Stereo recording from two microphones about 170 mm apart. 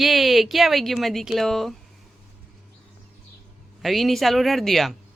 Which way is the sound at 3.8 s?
Centre (ahead or behind).